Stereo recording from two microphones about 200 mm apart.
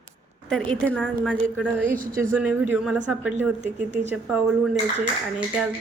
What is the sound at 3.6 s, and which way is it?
Speech, 35° right (ahead or behind).